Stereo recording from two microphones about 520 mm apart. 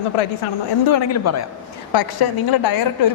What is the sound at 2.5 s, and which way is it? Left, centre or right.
Speech, left.